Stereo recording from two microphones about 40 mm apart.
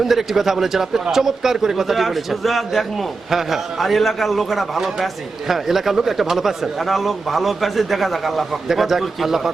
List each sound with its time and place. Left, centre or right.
0.0 s speech: centre